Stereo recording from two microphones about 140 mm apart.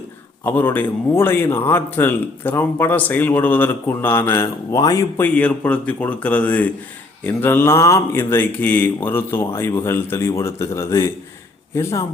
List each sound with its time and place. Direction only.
0.4 s speech: 15° left (ahead or behind)
5.2 s speech: 10° left (ahead or behind)